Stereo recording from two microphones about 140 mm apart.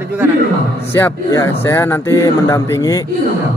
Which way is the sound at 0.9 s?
20° left (ahead or behind).